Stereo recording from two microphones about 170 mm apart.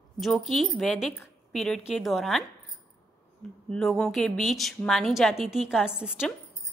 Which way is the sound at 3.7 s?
5° left (ahead or behind).